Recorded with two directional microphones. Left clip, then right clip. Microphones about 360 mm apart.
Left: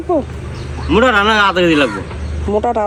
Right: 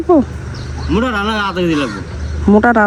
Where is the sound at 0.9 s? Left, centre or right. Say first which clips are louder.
Left 6 dB; centre.